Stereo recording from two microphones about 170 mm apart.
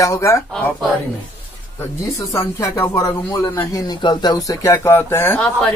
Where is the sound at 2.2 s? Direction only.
20° left (ahead or behind).